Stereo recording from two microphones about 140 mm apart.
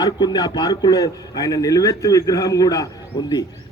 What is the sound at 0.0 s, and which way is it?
A man's voice, 30° left (ahead or behind).